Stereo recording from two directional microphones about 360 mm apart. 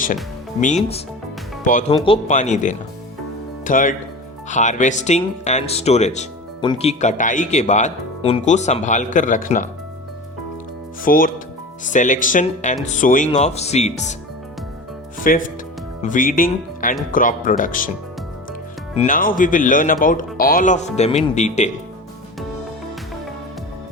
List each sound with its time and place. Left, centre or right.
1.6 s speech: left
11.0 s speech: left
15.2 s speech: left
18.9 s speech: left